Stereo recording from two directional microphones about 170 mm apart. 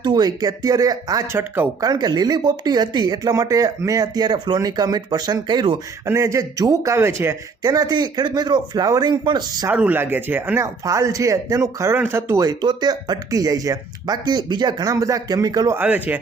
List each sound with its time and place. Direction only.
0.0 s speech: 25° right (ahead or behind)
9.7 s speech: 10° right (ahead or behind)